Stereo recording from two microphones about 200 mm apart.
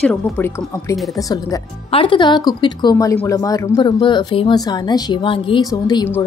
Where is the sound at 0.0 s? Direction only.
5° left (ahead or behind).